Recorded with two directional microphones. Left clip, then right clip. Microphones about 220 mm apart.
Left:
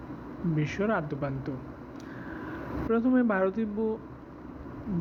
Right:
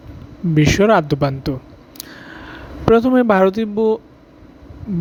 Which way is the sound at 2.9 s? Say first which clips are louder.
Right 14 dB; 55° right (ahead or behind).